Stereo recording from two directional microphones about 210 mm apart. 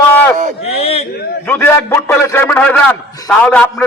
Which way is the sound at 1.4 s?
10° left (ahead or behind).